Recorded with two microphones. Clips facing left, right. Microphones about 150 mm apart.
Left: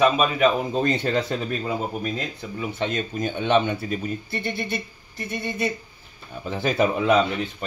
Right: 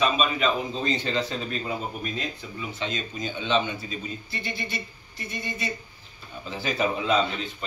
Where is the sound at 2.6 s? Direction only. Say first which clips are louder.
Left 6 dB; 55° left (ahead or behind).